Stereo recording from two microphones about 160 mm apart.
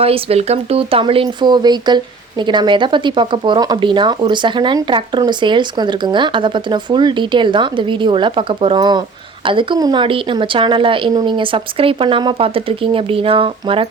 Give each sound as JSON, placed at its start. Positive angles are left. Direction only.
{"t": 0.0, "sound": "speech", "side_deg": -40}